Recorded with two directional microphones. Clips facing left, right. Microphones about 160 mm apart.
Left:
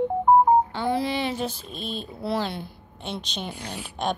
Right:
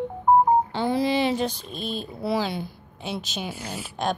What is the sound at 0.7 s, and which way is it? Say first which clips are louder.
Telephone dialing: right 1 dB; 30° right (ahead or behind).